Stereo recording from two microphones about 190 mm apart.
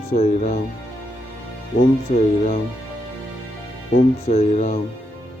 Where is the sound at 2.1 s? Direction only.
35° left (ahead or behind).